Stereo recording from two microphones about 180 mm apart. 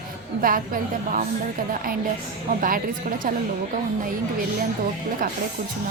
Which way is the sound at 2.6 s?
50° right (ahead or behind).